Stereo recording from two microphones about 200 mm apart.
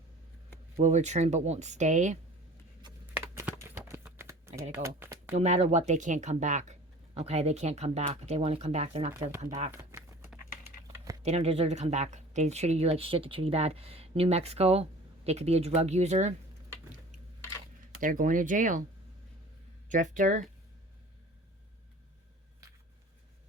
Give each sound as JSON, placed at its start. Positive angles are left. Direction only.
{"t": 0.8, "sound": "speech", "side_deg": -35}
{"t": 3.2, "sound": "typing", "side_deg": -10}
{"t": 4.7, "sound": "a sound", "side_deg": -10}
{"t": 5.4, "sound": "speech", "side_deg": -30}
{"t": 9.7, "sound": "a sound", "side_deg": -15}
{"t": 11.2, "sound": "speech", "side_deg": -30}
{"t": 18.0, "sound": "speech", "side_deg": -40}
{"t": 19.9, "sound": "speech", "side_deg": -40}